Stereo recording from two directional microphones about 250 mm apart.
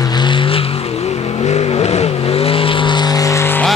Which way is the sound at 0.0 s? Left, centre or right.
Centre.